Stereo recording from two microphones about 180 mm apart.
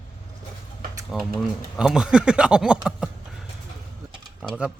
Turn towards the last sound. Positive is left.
turn(degrees=-5)  # may be behind; listen again after turning